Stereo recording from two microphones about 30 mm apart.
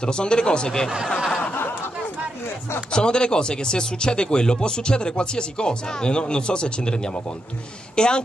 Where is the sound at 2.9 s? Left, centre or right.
Left.